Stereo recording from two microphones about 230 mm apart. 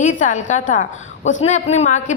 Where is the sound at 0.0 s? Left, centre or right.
Left.